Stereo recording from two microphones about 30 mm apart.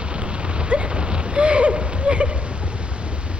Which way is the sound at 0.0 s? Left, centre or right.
Right.